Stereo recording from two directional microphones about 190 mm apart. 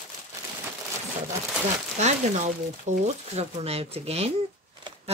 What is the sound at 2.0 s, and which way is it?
Speech, 35° right (ahead or behind).